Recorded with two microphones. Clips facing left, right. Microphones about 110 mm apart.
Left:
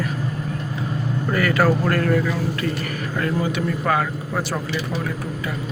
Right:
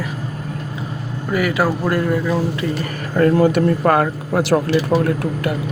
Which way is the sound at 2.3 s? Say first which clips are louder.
Right 4 dB; 30° right (ahead or behind).